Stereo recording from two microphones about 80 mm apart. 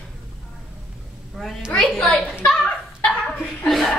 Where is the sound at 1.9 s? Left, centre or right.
Centre.